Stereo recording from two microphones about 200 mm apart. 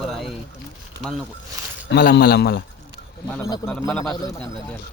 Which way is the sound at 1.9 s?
55° left (ahead or behind).